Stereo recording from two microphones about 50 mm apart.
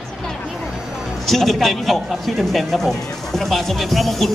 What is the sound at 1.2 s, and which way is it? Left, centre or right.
A man's voice, centre.